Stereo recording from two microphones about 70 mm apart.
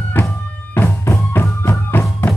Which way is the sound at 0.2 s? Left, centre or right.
Left.